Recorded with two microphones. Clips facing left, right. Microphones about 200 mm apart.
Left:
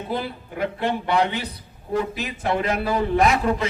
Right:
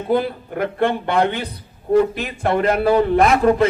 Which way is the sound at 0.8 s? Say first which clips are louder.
Right 4 dB; 55° right (ahead or behind).